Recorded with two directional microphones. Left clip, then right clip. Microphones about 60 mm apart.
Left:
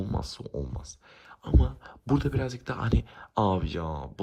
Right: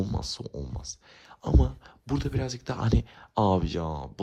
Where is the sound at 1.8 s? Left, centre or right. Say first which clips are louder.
Left 4 dB; right.